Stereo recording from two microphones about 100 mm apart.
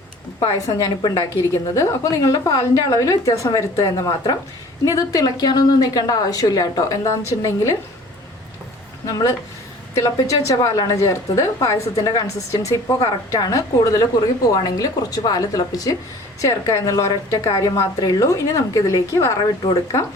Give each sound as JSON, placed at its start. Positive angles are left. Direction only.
{"t": 0.3, "sound": "a woman's voice", "side_deg": 35}
{"t": 9.0, "sound": "a woman's voice", "side_deg": 35}